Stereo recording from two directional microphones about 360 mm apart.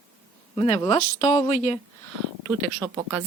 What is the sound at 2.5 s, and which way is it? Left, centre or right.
Speech, centre.